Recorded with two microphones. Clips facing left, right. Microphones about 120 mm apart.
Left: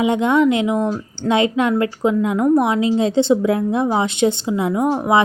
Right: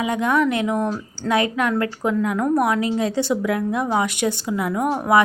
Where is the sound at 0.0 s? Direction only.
25° left (ahead or behind).